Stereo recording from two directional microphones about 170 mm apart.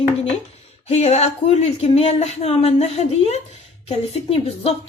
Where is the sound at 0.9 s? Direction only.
40° left (ahead or behind).